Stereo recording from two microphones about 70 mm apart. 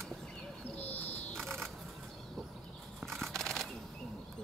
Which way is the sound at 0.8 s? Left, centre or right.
Left.